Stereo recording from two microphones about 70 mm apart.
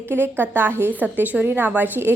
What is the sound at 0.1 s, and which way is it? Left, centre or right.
A woman's voice, right.